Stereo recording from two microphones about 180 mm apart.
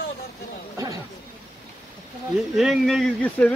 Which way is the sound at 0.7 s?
15° right (ahead or behind).